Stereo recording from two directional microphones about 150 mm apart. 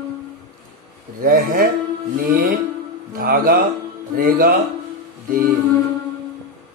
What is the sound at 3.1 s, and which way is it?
Speech, 75° right (ahead or behind).